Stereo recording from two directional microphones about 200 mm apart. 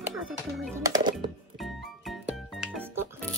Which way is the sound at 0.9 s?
20° right (ahead or behind).